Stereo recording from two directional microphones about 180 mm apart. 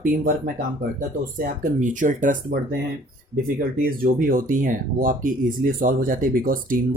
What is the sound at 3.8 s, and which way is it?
Speech, 50° right (ahead or behind).